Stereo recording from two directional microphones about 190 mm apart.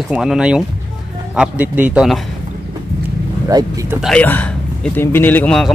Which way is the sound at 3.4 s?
15° right (ahead or behind).